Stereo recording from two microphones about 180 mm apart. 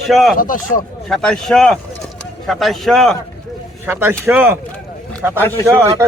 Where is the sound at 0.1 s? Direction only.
Centre (ahead or behind).